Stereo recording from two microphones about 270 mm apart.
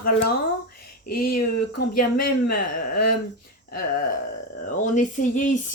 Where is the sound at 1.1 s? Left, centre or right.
Left.